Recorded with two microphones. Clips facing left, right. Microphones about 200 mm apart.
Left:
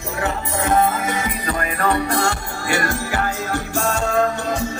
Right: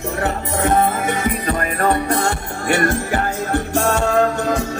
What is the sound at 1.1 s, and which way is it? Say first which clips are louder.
Music: right 4 dB; 55° right (ahead or behind).